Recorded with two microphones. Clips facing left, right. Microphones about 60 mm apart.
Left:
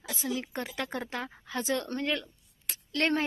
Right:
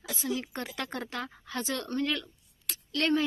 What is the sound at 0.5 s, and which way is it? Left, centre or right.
Speech, centre.